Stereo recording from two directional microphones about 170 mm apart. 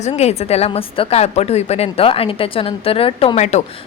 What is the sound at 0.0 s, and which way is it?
A woman's voice, 40° left (ahead or behind).